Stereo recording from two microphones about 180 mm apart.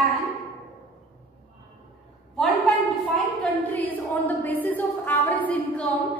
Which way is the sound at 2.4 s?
Centre (ahead or behind).